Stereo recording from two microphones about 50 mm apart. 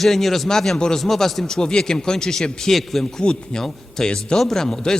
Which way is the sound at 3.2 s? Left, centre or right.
Centre.